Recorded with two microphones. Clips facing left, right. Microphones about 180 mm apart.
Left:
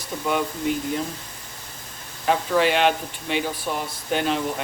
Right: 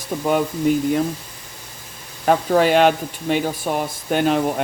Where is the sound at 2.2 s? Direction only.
45° right (ahead or behind).